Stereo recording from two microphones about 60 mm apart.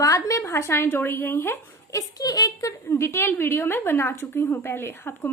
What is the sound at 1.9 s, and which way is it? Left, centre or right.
Speech, left.